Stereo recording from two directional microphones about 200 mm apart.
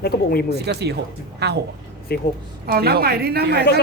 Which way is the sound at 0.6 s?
55° right (ahead or behind).